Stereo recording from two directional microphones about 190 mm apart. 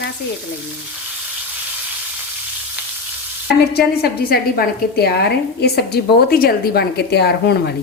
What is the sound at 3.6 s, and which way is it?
A woman's voice, 55° left (ahead or behind).